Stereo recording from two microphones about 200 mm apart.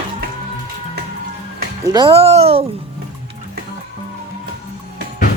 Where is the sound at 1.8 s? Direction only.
20° right (ahead or behind).